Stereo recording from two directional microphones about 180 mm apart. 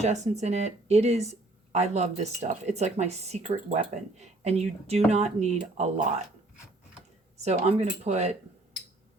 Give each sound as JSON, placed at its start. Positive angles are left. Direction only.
{"t": 0.0, "sound": "speech", "side_deg": -40}
{"t": 7.4, "sound": "speech", "side_deg": -35}